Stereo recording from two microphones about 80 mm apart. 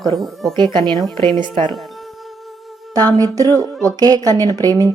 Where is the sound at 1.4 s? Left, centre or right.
Right.